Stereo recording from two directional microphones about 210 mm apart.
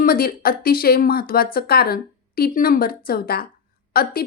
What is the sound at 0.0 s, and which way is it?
A woman's voice, 45° left (ahead or behind).